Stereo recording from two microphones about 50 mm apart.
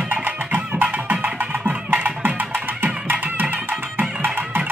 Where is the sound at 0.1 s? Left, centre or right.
Right.